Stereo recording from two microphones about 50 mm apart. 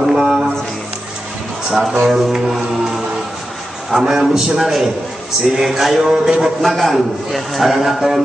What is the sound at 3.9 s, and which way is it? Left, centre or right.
A man's voice, centre.